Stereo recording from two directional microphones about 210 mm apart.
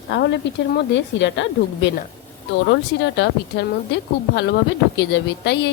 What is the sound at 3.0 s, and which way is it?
A woman's voice, 55° left (ahead or behind).